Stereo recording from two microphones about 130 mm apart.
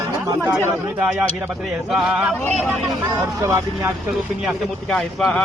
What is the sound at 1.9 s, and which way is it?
Speech, 5° right (ahead or behind).